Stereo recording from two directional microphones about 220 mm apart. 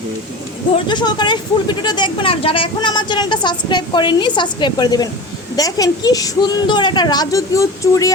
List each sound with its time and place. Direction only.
0.9 s a woman's voice: 20° left (ahead or behind)